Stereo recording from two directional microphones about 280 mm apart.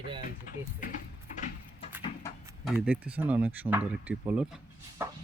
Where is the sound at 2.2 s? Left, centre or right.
Centre.